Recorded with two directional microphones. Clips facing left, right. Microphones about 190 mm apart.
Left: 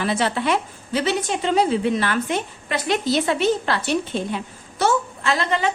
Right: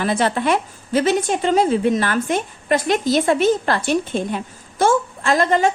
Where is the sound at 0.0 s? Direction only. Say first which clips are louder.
Right 3 dB; 50° right (ahead or behind).